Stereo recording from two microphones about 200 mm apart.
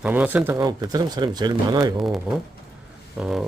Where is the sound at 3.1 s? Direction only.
5° right (ahead or behind).